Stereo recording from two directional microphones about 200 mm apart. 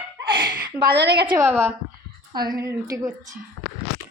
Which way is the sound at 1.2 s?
15° right (ahead or behind).